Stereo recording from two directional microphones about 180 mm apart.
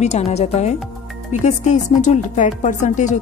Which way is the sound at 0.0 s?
35° left (ahead or behind).